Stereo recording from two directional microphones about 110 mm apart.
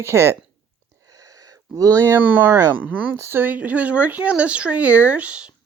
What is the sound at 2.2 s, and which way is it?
Speech, 15° right (ahead or behind).